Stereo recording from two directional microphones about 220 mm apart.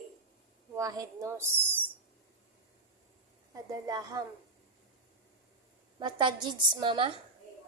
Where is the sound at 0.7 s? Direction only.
15° right (ahead or behind).